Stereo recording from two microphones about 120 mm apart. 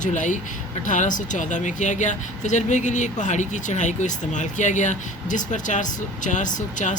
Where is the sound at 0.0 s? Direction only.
90° left.